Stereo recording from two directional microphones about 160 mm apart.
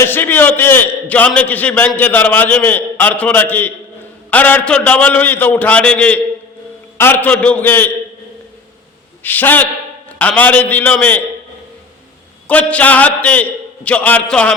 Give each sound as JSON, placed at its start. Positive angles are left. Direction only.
{"t": 0.0, "sound": "a man's voice", "side_deg": 15}
{"t": 9.2, "sound": "a man's voice", "side_deg": 10}
{"t": 12.5, "sound": "a man's voice", "side_deg": 10}